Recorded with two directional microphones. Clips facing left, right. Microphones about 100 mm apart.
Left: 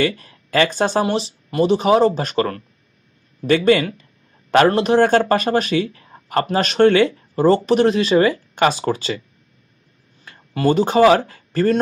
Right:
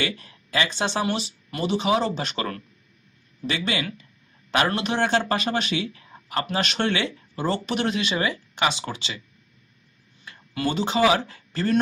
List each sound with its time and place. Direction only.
0.0 s speech: 40° left (ahead or behind)
3.4 s a sound: 45° left (ahead or behind)
4.6 s speech: 35° left (ahead or behind)
10.2 s speech: 40° left (ahead or behind)